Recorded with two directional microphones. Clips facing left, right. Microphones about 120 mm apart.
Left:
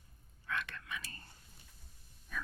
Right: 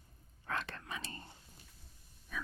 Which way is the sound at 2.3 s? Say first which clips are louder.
Even; centre (ahead or behind).